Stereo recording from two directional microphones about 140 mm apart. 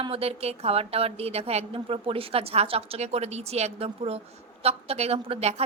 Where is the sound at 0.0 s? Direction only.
45° right (ahead or behind).